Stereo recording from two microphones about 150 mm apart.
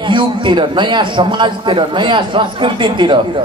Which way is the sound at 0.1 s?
30° right (ahead or behind).